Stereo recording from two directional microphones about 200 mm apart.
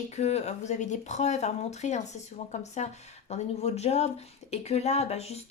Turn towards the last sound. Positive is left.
turn(degrees=30)  # may be behind; listen again after turning